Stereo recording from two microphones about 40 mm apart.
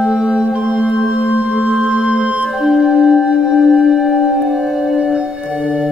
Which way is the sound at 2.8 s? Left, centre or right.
Centre.